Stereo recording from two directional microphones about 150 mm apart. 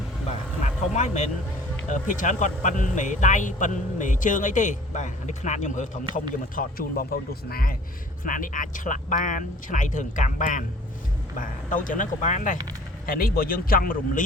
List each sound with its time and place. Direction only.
0.6 s speech: 50° left (ahead or behind)
6.6 s speech: 75° left (ahead or behind)
8.2 s speech: 65° left (ahead or behind)
13.1 s speech: 75° left (ahead or behind)